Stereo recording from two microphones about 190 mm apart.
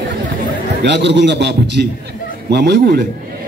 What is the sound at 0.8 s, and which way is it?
A man's voice, 65° right (ahead or behind).